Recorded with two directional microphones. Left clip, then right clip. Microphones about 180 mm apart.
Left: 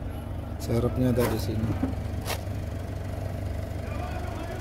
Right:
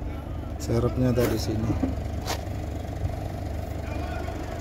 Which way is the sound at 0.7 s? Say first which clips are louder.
Right 1 dB; 10° right (ahead or behind).